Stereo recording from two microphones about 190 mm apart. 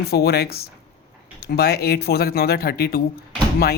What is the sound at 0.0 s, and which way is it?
Speech, 55° left (ahead or behind).